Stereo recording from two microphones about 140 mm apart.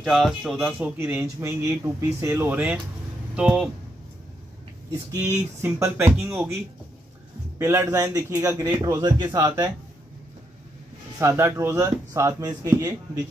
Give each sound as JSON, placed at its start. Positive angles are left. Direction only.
{"t": 0.0, "sound": "speech", "side_deg": 0}
{"t": 5.1, "sound": "speech", "side_deg": -20}
{"t": 7.5, "sound": "speech", "side_deg": -20}
{"t": 11.1, "sound": "speech", "side_deg": -20}